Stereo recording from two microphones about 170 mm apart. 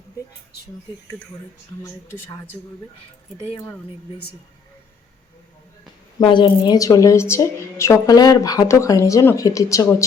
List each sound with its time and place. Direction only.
1.8 s speech: 15° left (ahead or behind)
6.1 s a woman's voice: 30° left (ahead or behind)